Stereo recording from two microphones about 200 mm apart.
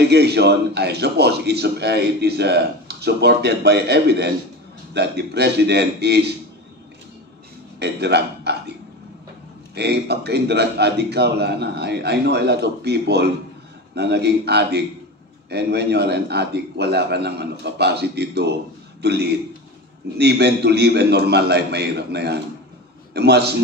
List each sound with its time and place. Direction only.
0.0 s a man's voice: 55° right (ahead or behind)
7.8 s a man's voice: 55° right (ahead or behind)
9.8 s a man's voice: 55° right (ahead or behind)